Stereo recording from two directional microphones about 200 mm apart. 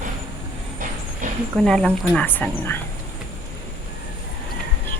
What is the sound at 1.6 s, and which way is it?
Speech, 5° left (ahead or behind).